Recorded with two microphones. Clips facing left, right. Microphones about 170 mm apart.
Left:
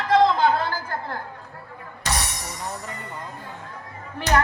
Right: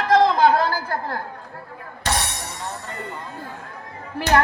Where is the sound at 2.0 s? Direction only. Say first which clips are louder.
Right 3 dB; 30° right (ahead or behind).